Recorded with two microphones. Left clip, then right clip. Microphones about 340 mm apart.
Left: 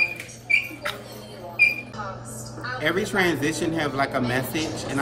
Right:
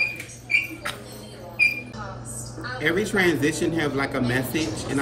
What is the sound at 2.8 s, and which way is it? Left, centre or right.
A man's voice, centre.